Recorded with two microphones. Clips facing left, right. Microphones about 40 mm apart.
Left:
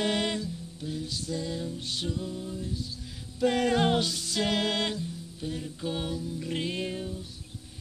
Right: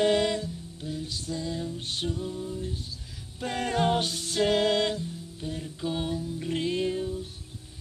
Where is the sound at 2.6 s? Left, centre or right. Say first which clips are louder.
Even; right.